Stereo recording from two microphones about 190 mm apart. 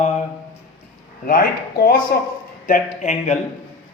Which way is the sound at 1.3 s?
50° left (ahead or behind).